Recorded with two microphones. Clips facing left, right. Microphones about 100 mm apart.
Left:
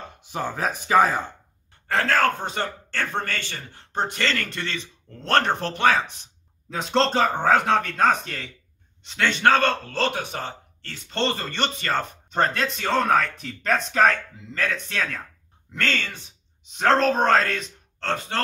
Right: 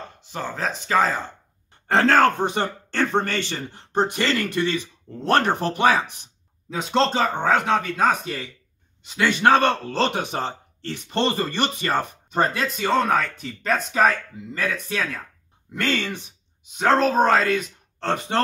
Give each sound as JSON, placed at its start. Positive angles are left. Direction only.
{"t": 0.3, "sound": "speech", "side_deg": 15}
{"t": 1.9, "sound": "speech", "side_deg": -25}
{"t": 6.7, "sound": "speech", "side_deg": 0}
{"t": 16.7, "sound": "speech", "side_deg": -5}
{"t": 18.0, "sound": "speech", "side_deg": -15}